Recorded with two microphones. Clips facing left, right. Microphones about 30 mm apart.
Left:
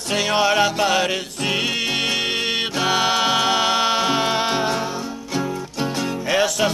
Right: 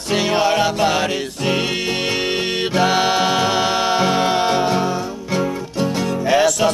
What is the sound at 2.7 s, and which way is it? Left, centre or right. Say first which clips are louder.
Music: right 4 dB; centre.